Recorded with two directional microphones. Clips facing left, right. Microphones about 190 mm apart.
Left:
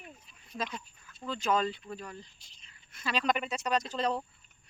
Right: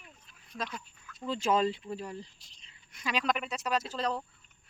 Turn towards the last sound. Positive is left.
turn(degrees=0)  # may be behind; listen again after turning